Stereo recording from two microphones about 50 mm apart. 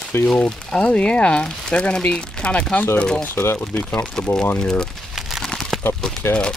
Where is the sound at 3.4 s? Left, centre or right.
Left.